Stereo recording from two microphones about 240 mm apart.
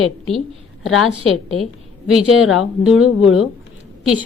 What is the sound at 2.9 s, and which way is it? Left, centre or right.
Speech, left.